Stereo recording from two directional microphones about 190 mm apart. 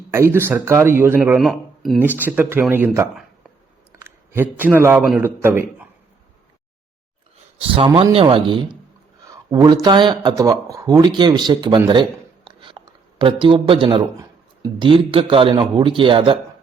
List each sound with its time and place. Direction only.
0.1 s a man's voice: 15° right (ahead or behind)
7.8 s a man's voice: 30° right (ahead or behind)
12.5 s a sound: 25° right (ahead or behind)
14.8 s a man's voice: 25° right (ahead or behind)